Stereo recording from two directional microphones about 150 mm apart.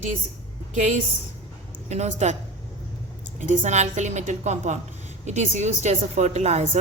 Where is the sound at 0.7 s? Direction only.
55° right (ahead or behind).